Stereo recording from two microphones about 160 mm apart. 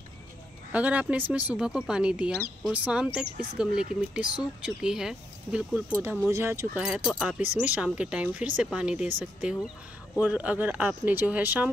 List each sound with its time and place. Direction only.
0.7 s speech: 10° right (ahead or behind)
5.9 s speech: 15° right (ahead or behind)
6.8 s speech: 5° right (ahead or behind)